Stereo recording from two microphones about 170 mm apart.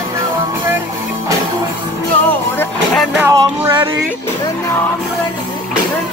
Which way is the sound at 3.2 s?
15° right (ahead or behind).